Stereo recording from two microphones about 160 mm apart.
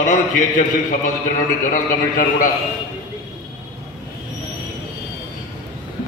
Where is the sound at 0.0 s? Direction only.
55° left (ahead or behind).